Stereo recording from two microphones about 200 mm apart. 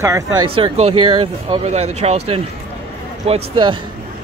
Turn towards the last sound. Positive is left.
turn(degrees=-25)  # may be behind; listen again after turning